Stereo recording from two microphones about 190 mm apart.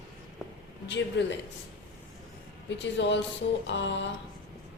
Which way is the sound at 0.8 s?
65° left (ahead or behind).